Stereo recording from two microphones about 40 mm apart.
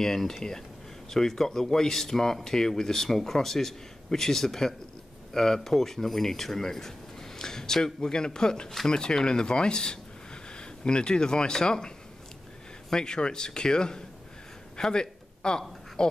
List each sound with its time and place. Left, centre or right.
0.0 s speech: centre
12.9 s speech: centre
14.8 s a sound: centre
16.0 s speech: centre